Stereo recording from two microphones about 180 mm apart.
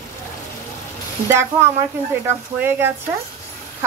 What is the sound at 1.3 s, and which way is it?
Speech, 15° right (ahead or behind).